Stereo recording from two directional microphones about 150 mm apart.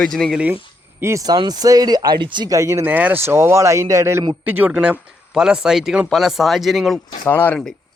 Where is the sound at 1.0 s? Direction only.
20° right (ahead or behind); by 7.0 s centre (ahead or behind).